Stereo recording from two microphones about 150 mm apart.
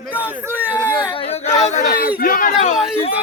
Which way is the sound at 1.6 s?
55° left (ahead or behind).